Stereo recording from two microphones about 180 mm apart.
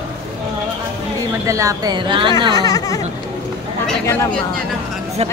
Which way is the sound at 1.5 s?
15° right (ahead or behind).